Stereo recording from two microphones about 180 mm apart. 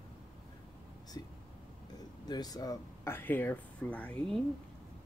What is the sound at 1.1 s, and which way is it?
Speech, 20° left (ahead or behind).